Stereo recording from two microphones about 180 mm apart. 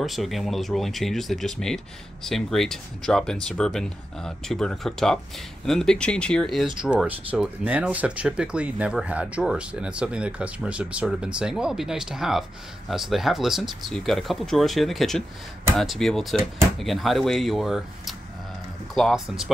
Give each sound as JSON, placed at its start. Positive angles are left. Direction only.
{"t": 0.0, "sound": "speech", "side_deg": 0}